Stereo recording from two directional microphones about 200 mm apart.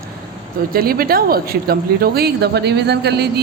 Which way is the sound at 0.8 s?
45° right (ahead or behind).